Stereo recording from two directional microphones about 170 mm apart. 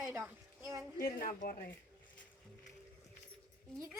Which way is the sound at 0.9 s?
60° left (ahead or behind).